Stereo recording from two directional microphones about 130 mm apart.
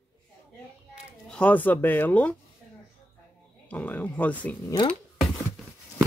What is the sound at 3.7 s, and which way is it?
Speech, 10° left (ahead or behind).